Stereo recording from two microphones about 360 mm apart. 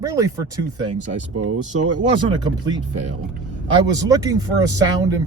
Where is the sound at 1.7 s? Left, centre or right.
Right.